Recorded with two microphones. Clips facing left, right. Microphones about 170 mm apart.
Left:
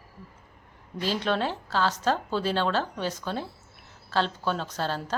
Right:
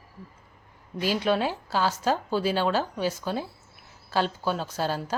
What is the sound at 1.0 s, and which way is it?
Speech, 10° right (ahead or behind).